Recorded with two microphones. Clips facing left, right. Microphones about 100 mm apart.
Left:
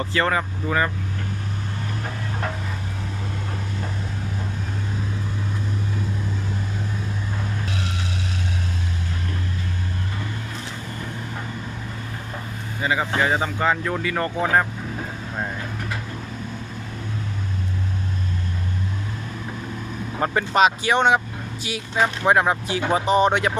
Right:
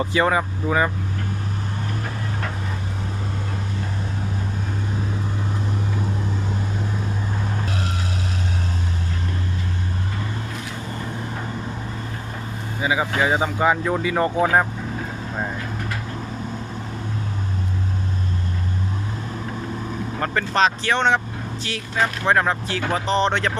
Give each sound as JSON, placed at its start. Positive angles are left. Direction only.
{"t": 0.0, "sound": "speech", "side_deg": -15}
{"t": 12.8, "sound": "speech", "side_deg": -5}
{"t": 20.1, "sound": "speech", "side_deg": 15}